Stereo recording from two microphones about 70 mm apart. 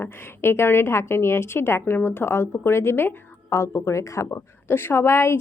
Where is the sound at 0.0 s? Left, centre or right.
Left.